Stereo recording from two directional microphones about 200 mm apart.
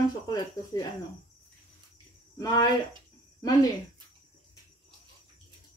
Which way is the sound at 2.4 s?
20° left (ahead or behind).